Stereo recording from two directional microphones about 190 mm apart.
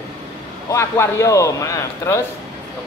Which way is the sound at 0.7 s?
15° left (ahead or behind).